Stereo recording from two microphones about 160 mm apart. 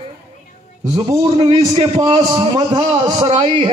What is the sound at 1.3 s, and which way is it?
A man's voice, 40° right (ahead or behind).